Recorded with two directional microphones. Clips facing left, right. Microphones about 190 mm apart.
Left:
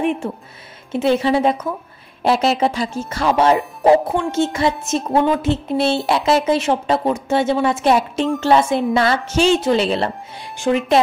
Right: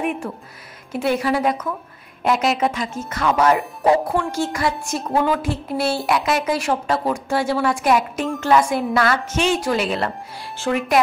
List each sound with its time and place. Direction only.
0.0 s a woman's voice: 25° left (ahead or behind)